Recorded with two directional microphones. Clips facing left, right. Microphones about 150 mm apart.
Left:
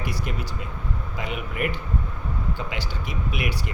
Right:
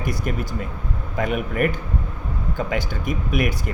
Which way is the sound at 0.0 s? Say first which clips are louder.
Right 5 dB; 50° right (ahead or behind).